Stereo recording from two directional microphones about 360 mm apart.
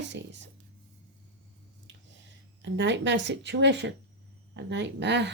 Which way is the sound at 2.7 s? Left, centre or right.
Right.